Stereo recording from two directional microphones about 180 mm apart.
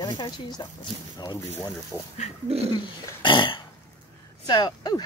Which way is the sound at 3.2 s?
25° left (ahead or behind).